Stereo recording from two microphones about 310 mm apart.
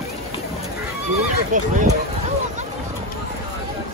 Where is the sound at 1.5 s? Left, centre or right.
Right.